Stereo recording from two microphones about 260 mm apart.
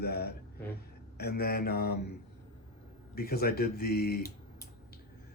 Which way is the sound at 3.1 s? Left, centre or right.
Left.